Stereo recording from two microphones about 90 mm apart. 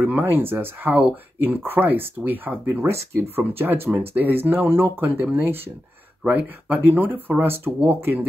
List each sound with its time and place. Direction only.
0.0 s speech: 20° right (ahead or behind)